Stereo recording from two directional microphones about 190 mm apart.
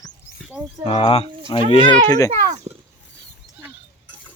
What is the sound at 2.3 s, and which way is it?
Speech, 40° right (ahead or behind).